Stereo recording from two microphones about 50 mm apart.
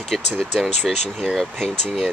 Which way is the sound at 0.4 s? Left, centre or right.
Centre.